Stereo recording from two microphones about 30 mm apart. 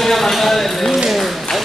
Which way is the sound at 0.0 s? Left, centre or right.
Centre.